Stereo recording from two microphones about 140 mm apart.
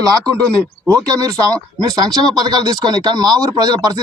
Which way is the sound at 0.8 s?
25° right (ahead or behind).